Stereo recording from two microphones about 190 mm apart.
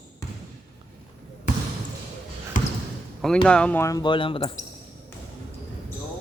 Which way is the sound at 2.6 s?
45° left (ahead or behind).